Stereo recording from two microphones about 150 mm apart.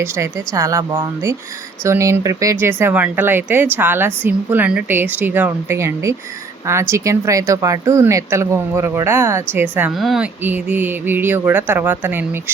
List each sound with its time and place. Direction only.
0.0 s speech: 20° right (ahead or behind)
10.0 s speech: centre (ahead or behind)
10.4 s speech: 10° right (ahead or behind)